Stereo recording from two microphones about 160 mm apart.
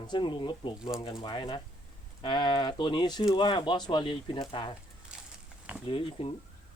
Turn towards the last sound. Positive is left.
turn(degrees=35)  # may be behind; listen again after turning